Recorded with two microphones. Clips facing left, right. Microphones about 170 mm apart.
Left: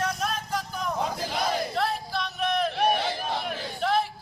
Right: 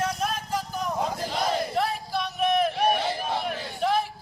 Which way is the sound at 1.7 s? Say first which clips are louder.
Right 1 dB; 5° right (ahead or behind).